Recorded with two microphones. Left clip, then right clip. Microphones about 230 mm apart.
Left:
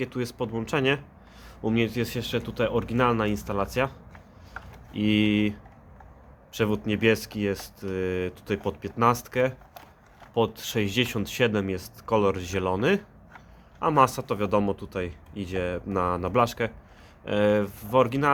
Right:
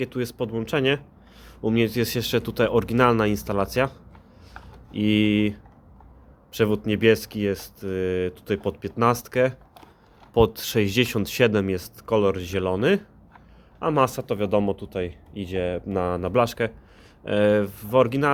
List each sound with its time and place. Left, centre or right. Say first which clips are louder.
0.0 s speech: right 3 dB; centre